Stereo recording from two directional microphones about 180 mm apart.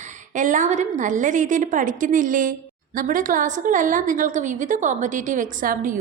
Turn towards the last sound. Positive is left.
turn(degrees=-50)  # may be behind; listen again after turning